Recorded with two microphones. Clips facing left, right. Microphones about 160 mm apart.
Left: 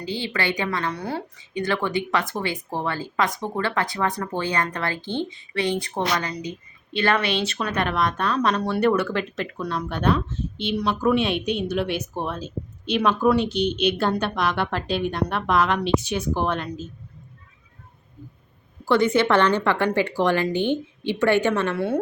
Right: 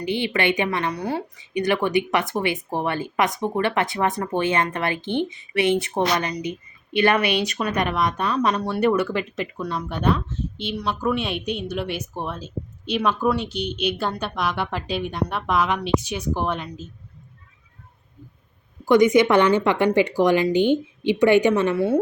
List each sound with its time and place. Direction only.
0.0 s a woman's voice: 20° right (ahead or behind)
18.9 s a woman's voice: 15° right (ahead or behind)